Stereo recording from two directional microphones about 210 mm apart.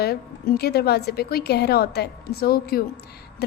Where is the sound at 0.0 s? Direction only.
50° left (ahead or behind).